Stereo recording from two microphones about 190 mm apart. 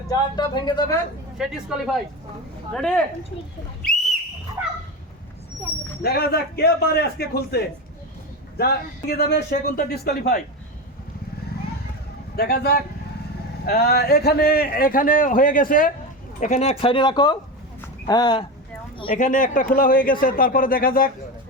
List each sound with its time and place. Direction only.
0.3 s speech: 25° left (ahead or behind)
1.4 s speech: 5° right (ahead or behind)
4.6 s dog: 10° right (ahead or behind)
6.0 s a man's voice: 55° left (ahead or behind)
12.4 s a man's voice: 55° left (ahead or behind); by 18.4 s 20° left (ahead or behind)
19.0 s a man's voice: 45° left (ahead or behind)